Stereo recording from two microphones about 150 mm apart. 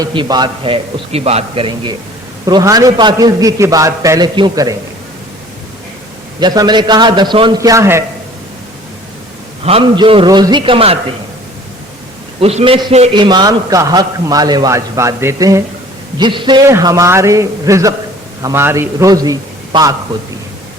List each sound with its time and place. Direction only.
0.0 s a man's voice: 30° right (ahead or behind)
6.4 s a man's voice: 30° right (ahead or behind)
9.6 s a man's voice: 35° right (ahead or behind)
12.4 s a man's voice: 40° right (ahead or behind)
13.1 s a man's voice: 30° right (ahead or behind)
16.1 s a man's voice: 30° right (ahead or behind)
16.6 s a man's voice: 20° right (ahead or behind)